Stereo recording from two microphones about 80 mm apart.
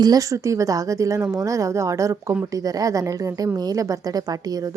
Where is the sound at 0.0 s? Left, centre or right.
Right.